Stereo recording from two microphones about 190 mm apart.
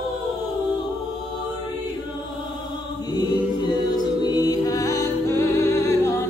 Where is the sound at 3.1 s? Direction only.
20° left (ahead or behind).